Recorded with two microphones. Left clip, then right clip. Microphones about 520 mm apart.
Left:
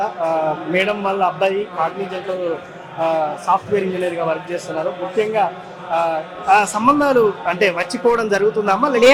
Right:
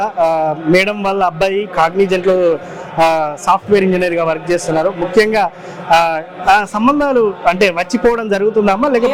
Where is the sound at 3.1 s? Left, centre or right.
Right.